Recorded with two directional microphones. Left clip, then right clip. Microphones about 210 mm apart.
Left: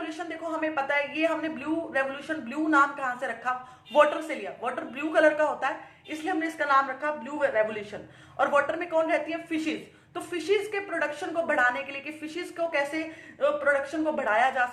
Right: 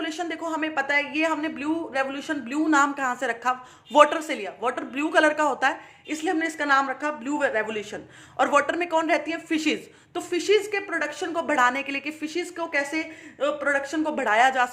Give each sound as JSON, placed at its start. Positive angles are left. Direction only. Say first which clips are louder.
{"t": 0.0, "sound": "a woman's voice", "louder": "right 5 dB", "side_deg": -50}